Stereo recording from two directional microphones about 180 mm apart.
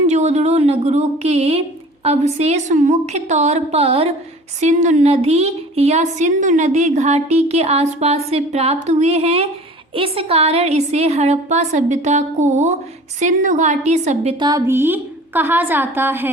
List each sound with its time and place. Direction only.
0.1 s a woman's voice: 40° right (ahead or behind)
14.3 s a woman's voice: 20° right (ahead or behind)